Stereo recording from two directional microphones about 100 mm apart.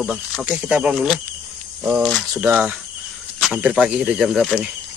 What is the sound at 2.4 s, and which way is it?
Cricket, 20° right (ahead or behind).